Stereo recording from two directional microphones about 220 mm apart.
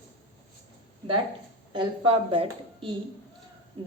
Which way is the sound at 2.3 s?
25° right (ahead or behind).